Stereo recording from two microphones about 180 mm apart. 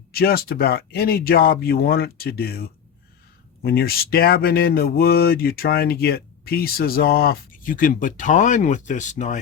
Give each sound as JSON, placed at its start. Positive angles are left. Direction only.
{"t": 0.1, "sound": "speech", "side_deg": 60}